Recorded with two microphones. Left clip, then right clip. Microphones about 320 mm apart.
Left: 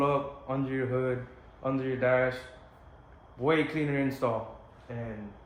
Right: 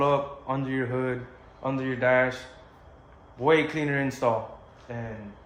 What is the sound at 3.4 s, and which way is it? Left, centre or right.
Speech, right.